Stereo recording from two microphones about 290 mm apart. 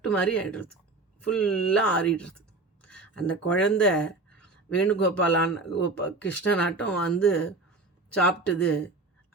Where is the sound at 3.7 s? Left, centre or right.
Centre.